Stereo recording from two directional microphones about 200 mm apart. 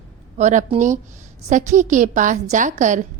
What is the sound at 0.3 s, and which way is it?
A woman's voice, 35° right (ahead or behind).